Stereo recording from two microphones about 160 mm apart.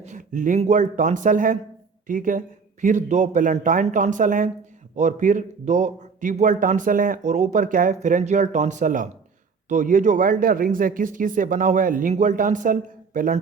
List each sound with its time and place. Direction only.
0.0 s a man's voice: 50° right (ahead or behind)